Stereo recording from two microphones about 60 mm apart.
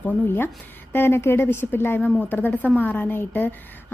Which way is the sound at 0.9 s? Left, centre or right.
Left.